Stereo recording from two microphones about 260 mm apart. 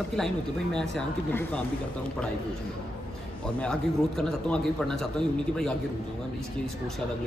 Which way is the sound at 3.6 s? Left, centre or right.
Centre.